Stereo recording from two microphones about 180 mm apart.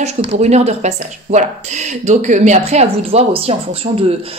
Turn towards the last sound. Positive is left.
turn(degrees=-35)  # may be behind; listen again after turning